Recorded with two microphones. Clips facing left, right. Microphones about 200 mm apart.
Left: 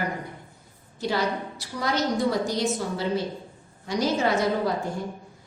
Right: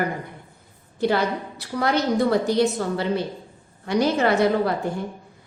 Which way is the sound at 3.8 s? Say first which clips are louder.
Right 4 dB; 60° right (ahead or behind).